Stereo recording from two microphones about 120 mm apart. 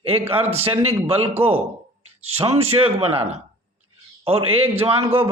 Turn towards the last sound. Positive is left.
turn(degrees=-55)  # may be behind; listen again after turning